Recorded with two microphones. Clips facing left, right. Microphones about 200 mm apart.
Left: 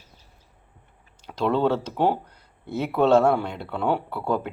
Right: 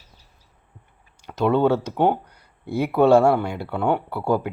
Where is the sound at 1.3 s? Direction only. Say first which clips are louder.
Right 3 dB; 5° right (ahead or behind).